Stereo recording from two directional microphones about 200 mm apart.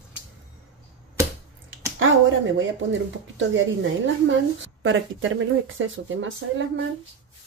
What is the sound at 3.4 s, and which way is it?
A woman's voice, 65° right (ahead or behind).